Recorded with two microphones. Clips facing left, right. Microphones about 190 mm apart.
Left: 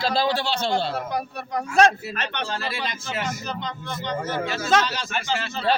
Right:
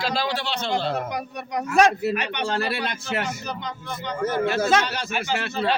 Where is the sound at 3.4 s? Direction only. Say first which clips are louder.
Left 1 dB; 10° right (ahead or behind).